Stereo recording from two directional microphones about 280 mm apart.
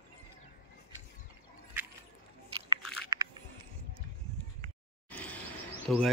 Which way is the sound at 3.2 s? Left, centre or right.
Centre.